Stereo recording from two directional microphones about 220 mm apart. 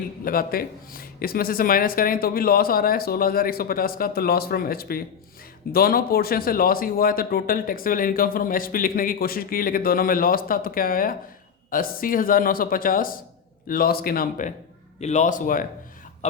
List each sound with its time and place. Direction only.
0.3 s speech: 40° left (ahead or behind)